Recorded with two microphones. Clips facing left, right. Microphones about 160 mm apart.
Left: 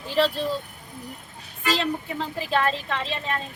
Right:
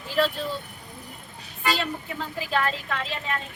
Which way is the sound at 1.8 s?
30° left (ahead or behind).